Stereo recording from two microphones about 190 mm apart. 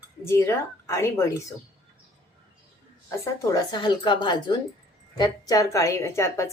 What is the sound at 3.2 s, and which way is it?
A woman's voice, 15° left (ahead or behind).